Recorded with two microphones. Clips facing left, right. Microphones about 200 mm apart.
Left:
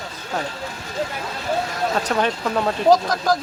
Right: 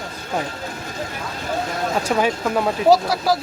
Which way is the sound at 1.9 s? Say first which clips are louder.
Right 3 dB; 10° right (ahead or behind).